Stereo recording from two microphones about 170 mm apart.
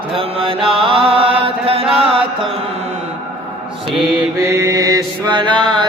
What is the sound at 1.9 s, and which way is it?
Chant, 30° right (ahead or behind).